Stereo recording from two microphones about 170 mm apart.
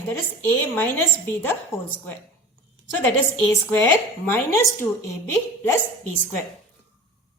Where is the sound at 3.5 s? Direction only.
15° left (ahead or behind).